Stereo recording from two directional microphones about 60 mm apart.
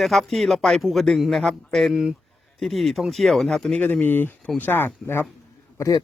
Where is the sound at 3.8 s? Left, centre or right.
Left.